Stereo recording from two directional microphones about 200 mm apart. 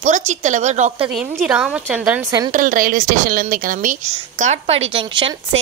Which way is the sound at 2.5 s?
40° right (ahead or behind).